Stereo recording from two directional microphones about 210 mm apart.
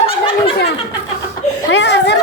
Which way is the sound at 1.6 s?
55° left (ahead or behind).